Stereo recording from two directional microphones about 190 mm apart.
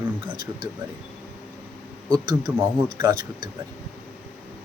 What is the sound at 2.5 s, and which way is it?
Speech, 10° right (ahead or behind).